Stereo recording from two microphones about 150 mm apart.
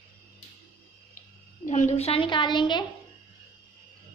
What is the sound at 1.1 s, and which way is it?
A woman's voice, 60° left (ahead or behind).